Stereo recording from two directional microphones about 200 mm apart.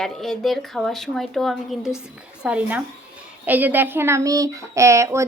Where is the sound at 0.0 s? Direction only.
Centre (ahead or behind).